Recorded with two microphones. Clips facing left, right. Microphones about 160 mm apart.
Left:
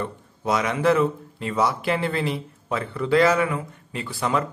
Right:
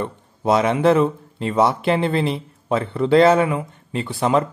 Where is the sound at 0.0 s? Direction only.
25° right (ahead or behind).